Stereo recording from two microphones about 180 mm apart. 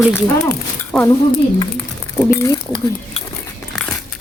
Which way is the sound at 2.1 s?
15° left (ahead or behind).